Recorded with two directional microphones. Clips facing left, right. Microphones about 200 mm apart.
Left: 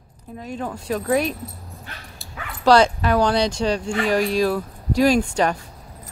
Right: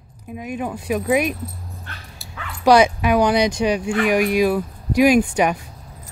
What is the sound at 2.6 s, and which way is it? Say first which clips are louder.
Speech: right 1 dB; 15° right (ahead or behind).